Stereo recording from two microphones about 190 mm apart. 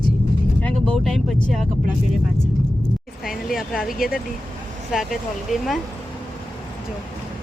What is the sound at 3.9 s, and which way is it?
Speech, 50° left (ahead or behind).